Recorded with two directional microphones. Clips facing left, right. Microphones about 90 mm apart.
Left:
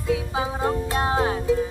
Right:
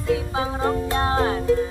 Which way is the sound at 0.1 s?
15° left (ahead or behind).